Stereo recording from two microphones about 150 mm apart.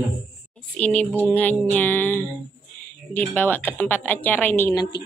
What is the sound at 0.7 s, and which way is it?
A woman's voice, 10° left (ahead or behind).